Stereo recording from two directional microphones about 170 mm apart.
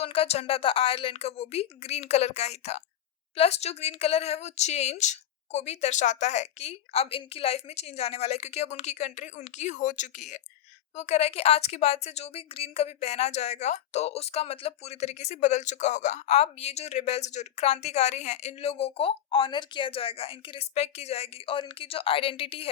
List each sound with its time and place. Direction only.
0.0 s a woman's voice: 35° left (ahead or behind)